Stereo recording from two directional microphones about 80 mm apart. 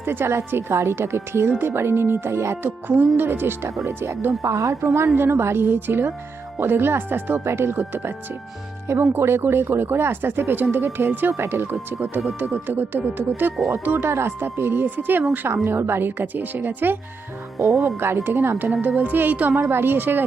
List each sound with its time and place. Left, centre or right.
0.0 s a woman's voice: right
2.8 s a woman's voice: right
5.0 s speech: right
17.6 s a woman's voice: right